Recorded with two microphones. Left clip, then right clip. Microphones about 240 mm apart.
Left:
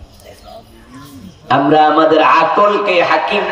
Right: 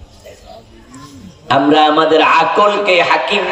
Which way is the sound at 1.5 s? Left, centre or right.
Right.